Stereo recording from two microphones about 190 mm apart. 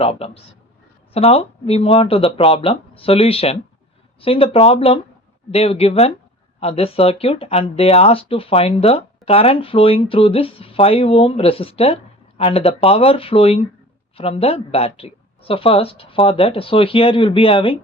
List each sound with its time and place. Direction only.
0.0 s speech: 30° left (ahead or behind)